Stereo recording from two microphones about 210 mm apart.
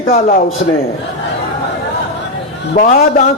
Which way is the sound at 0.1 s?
45° left (ahead or behind).